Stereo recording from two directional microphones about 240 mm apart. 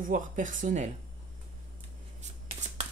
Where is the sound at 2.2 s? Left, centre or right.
Right.